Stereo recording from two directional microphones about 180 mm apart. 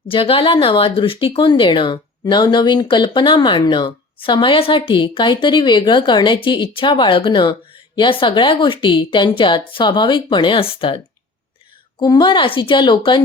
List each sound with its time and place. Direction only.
0.1 s speech: 30° left (ahead or behind)